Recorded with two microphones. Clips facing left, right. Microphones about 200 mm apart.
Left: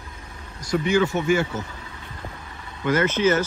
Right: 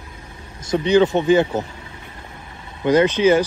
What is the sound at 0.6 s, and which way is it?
Speech, 25° right (ahead or behind).